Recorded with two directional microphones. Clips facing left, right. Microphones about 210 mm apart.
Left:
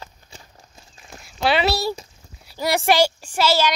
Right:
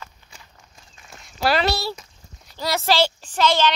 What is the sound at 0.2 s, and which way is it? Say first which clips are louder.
Walk: left 4 dB; 45° left (ahead or behind).